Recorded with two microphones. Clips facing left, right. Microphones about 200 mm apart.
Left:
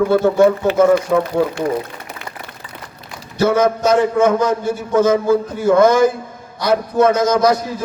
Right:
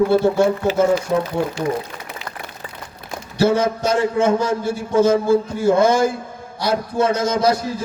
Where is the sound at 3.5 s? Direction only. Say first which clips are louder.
Left 5 dB; 50° left (ahead or behind).